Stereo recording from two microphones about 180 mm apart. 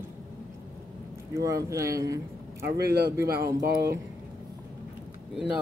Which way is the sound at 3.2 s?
10° right (ahead or behind).